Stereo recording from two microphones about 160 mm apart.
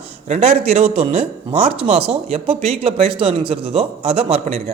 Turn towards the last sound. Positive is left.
turn(degrees=-40)  # may be behind; listen again after turning